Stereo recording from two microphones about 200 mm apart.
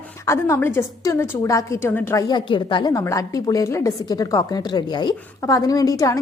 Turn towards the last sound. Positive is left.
turn(degrees=15)  # may be behind; listen again after turning